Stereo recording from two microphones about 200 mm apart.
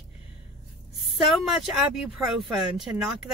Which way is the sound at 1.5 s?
Centre (ahead or behind).